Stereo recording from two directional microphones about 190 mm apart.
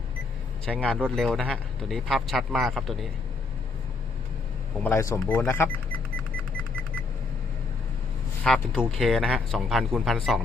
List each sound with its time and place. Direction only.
0.6 s a man's voice: 5° left (ahead or behind)
4.8 s speech: 10° left (ahead or behind)
8.4 s a man's voice: centre (ahead or behind)